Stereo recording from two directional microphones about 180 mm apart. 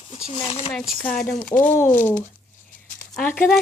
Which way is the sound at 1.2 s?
50° left (ahead or behind).